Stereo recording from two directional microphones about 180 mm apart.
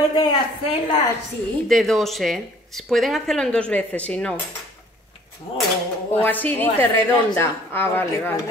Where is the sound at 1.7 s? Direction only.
Centre (ahead or behind).